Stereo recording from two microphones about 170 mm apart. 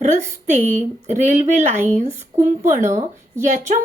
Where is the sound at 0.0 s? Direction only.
45° right (ahead or behind).